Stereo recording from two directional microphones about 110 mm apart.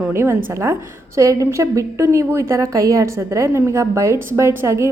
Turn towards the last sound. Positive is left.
turn(degrees=-25)  # may be behind; listen again after turning